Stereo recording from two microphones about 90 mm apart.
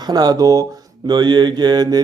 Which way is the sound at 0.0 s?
50° right (ahead or behind).